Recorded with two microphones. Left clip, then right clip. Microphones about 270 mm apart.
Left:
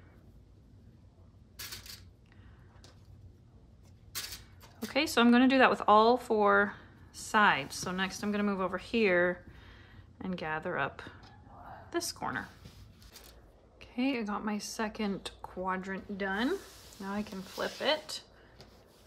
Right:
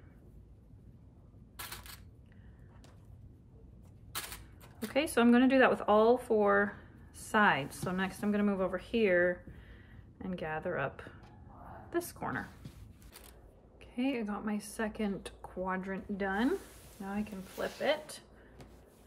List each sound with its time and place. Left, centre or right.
4.9 s a woman's voice: centre
13.7 s speech: centre